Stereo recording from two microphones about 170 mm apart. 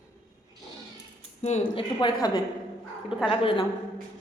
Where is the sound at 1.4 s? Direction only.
40° left (ahead or behind).